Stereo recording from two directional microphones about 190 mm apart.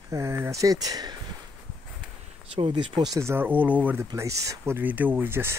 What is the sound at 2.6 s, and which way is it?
Speech, 25° right (ahead or behind).